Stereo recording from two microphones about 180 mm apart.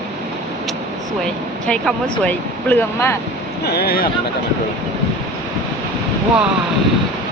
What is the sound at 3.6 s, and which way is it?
Speech, 60° left (ahead or behind).